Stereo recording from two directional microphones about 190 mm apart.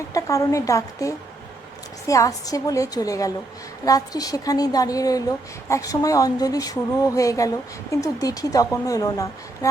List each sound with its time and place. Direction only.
0.1 s a woman's voice: 15° left (ahead or behind)